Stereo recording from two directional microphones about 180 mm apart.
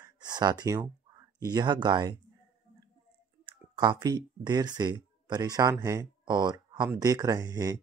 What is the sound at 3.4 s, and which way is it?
Speech, 25° right (ahead or behind).